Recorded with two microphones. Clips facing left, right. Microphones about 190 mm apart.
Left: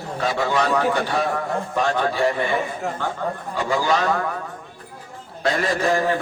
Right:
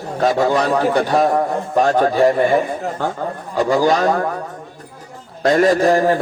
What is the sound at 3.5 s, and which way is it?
Speech, 40° right (ahead or behind).